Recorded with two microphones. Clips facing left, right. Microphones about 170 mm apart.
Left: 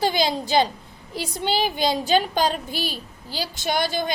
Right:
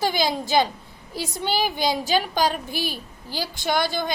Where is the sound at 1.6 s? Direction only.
20° left (ahead or behind).